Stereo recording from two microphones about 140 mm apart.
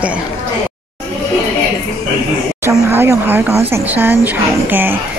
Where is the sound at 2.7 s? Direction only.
15° right (ahead or behind).